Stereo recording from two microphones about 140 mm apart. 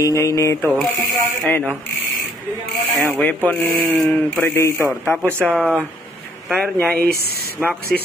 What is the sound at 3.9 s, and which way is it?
Speech, centre (ahead or behind).